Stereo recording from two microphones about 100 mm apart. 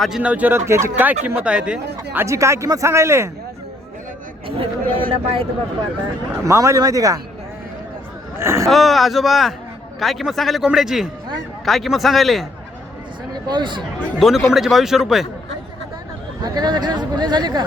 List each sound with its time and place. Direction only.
0.2 s speech: 15° right (ahead or behind)
2.1 s speech: 30° right (ahead or behind)
4.4 s speech: 65° right (ahead or behind)
6.4 s speech: 30° right (ahead or behind)
8.4 s speech: 25° right (ahead or behind)
8.6 s a man's voice: centre (ahead or behind)
13.3 s speech: 50° right (ahead or behind)
14.2 s a man's voice: centre (ahead or behind)
16.4 s speech: 45° right (ahead or behind)